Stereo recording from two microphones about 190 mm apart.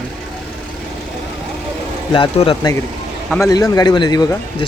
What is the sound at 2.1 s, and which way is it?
A man's voice, 30° left (ahead or behind).